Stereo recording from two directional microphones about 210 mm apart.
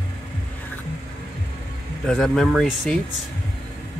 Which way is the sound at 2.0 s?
Centre (ahead or behind).